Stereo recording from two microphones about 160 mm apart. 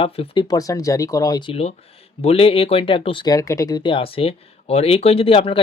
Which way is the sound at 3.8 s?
35° left (ahead or behind).